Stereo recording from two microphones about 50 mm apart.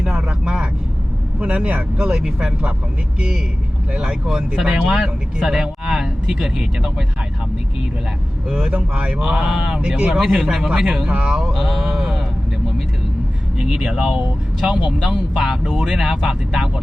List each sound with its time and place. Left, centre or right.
0.2 s vehicle: centre
1.4 s speech: right
2.0 s speech: centre
8.4 s speech: centre
9.2 s speech: centre
11.5 s speech: centre
13.6 s speech: centre